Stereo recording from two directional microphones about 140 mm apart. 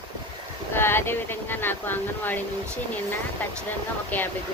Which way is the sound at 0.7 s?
15° left (ahead or behind).